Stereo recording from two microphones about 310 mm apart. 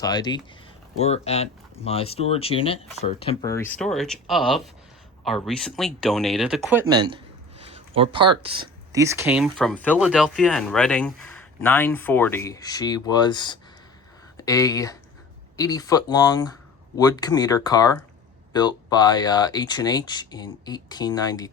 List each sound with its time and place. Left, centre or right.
0.0 s speech: centre
7.6 s a sound: centre
8.4 s speech: centre